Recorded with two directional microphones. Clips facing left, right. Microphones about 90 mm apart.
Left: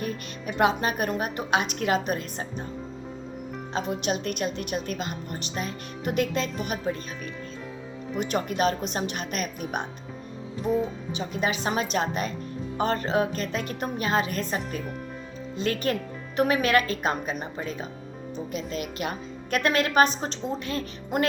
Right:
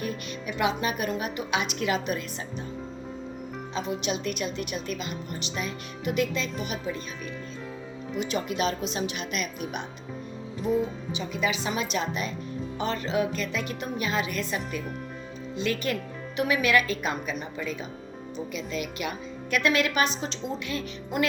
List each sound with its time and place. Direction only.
0.0 s a woman's voice: 40° left (ahead or behind)
3.7 s a woman's voice: 50° left (ahead or behind)
8.1 s a woman's voice: 45° left (ahead or behind)
11.1 s a woman's voice: 40° left (ahead or behind)